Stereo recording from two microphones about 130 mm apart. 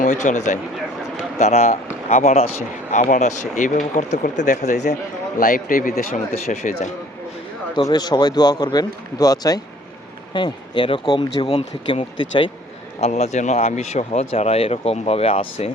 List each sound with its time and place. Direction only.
0.0 s speech: 70° left (ahead or behind)
1.4 s speech: 55° left (ahead or behind)
5.4 s a man's voice: 90° left
6.5 s speech: 60° left (ahead or behind)
7.8 s speech: 30° left (ahead or behind)
13.0 s speech: 55° left (ahead or behind)